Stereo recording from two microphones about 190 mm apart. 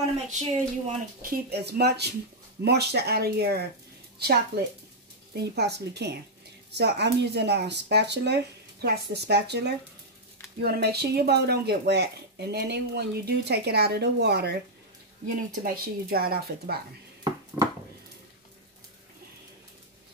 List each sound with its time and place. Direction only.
0.3 s speech: 40° right (ahead or behind); by 14.6 s 60° right (ahead or behind)
15.6 s a woman's voice: 50° right (ahead or behind)